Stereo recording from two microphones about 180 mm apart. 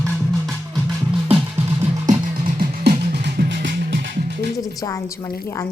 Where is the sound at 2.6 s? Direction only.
60° right (ahead or behind).